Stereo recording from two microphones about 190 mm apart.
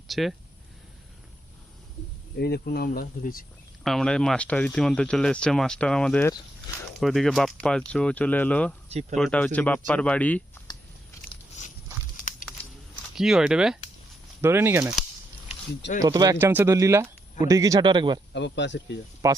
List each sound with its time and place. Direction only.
0.1 s speech: centre (ahead or behind)
2.4 s speech: 55° left (ahead or behind)
3.8 s speech: 5° left (ahead or behind)
6.7 s a sound: 20° left (ahead or behind)
7.0 s speech: centre (ahead or behind)
8.9 s speech: 35° right (ahead or behind)
9.1 s speech: 5° left (ahead or behind)
13.1 s speech: centre (ahead or behind)
16.0 s speech: 20° right (ahead or behind)
18.3 s speech: 65° left (ahead or behind)
19.2 s speech: 15° right (ahead or behind)